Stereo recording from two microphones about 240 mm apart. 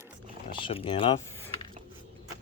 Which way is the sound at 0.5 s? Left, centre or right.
Left.